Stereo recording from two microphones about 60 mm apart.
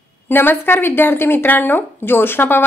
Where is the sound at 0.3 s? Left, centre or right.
Left.